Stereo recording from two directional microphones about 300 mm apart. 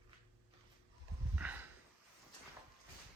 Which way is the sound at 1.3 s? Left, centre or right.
Centre.